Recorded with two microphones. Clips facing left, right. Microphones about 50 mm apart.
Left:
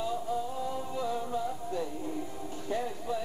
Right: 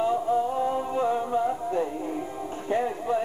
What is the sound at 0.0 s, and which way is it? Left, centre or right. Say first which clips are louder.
Music: right 9 dB; right.